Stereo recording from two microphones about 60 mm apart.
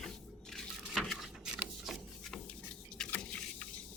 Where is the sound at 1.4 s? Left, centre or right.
Centre.